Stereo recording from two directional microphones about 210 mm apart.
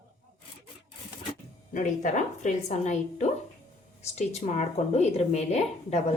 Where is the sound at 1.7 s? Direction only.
35° left (ahead or behind).